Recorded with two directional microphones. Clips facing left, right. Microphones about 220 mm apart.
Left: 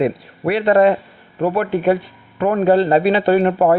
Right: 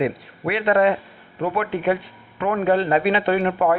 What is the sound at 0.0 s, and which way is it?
Speech, 35° left (ahead or behind).